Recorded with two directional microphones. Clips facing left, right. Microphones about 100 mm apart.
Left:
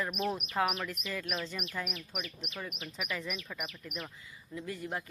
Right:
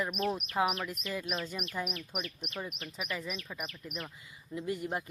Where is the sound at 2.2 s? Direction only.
Centre (ahead or behind).